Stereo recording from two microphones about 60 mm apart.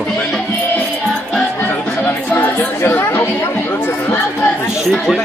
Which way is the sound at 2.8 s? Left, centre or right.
Left.